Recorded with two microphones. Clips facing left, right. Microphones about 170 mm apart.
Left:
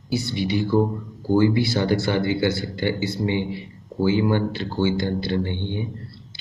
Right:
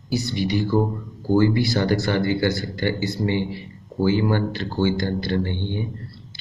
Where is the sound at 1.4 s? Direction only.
15° left (ahead or behind).